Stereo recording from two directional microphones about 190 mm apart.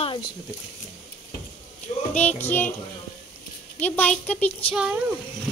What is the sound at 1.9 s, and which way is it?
Speech, 35° left (ahead or behind).